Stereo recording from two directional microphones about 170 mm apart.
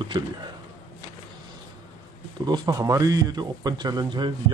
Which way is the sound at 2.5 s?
20° right (ahead or behind).